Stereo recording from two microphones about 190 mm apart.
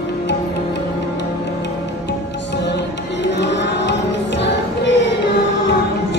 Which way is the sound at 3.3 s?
65° left (ahead or behind).